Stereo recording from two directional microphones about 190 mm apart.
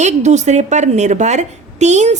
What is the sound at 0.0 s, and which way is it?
A woman's voice, 35° right (ahead or behind).